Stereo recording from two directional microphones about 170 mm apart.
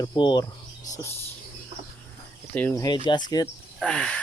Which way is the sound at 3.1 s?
25° left (ahead or behind).